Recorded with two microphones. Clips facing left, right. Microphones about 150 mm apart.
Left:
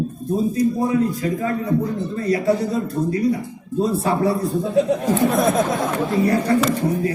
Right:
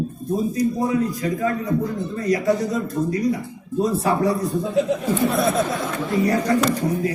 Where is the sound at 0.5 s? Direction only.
30° left (ahead or behind).